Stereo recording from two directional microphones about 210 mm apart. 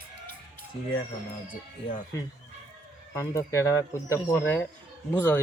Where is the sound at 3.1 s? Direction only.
15° left (ahead or behind).